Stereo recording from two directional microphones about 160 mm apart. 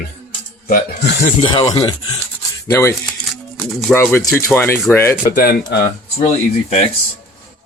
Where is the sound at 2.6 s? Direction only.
15° left (ahead or behind).